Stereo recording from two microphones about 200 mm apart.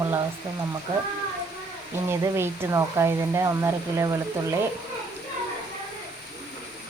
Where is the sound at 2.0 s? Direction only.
15° right (ahead or behind).